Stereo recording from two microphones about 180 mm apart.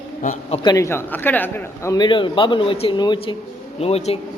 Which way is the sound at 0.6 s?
15° left (ahead or behind).